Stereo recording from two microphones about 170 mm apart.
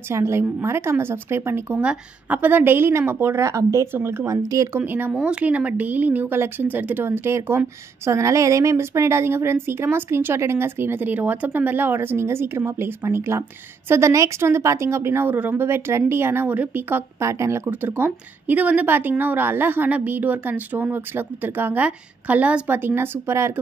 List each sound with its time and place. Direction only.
0.1 s a woman's voice: 15° right (ahead or behind)